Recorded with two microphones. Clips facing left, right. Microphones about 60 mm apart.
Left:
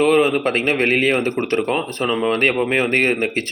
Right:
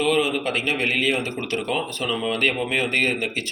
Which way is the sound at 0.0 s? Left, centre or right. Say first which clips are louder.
Left 6 dB; left.